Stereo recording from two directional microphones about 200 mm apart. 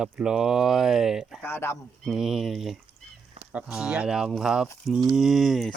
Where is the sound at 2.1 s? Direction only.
Centre (ahead or behind).